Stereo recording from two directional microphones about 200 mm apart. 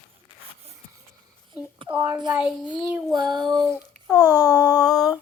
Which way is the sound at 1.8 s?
5° right (ahead or behind).